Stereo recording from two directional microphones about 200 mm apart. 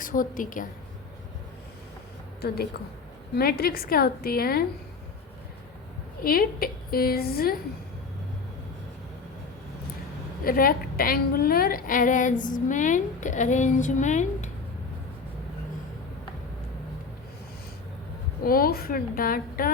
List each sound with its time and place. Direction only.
0.0 s a woman's voice: 45° left (ahead or behind)
3.3 s a woman's voice: 50° left (ahead or behind)
6.2 s a woman's voice: 45° left (ahead or behind)
10.4 s a woman's voice: 45° left (ahead or behind)
18.4 s a woman's voice: 45° left (ahead or behind)